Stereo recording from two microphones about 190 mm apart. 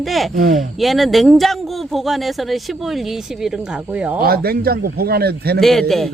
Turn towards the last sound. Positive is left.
turn(degrees=0)  # may be behind; listen again after turning